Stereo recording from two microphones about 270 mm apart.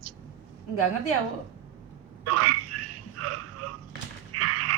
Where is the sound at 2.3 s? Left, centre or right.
Right.